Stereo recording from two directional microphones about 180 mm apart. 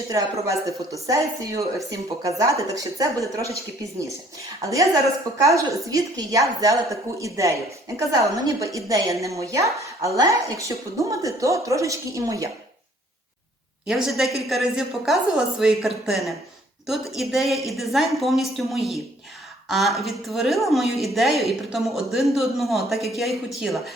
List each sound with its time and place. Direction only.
0.1 s a woman's voice: 15° right (ahead or behind)
5.4 s a woman's voice: 15° right (ahead or behind)
13.8 s a woman's voice: centre (ahead or behind)